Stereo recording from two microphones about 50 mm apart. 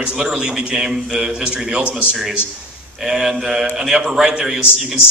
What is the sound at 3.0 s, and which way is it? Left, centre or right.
A man's voice, centre.